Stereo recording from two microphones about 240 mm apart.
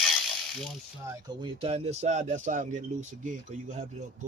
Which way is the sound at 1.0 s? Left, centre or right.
Centre.